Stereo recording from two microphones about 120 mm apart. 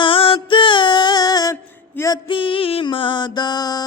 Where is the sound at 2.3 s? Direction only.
45° left (ahead or behind).